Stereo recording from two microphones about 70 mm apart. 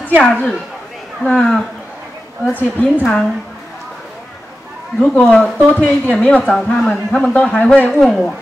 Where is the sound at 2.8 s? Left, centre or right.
Centre.